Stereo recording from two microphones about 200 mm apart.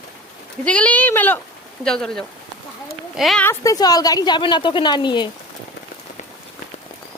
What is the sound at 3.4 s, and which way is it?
A woman's voice, 15° left (ahead or behind).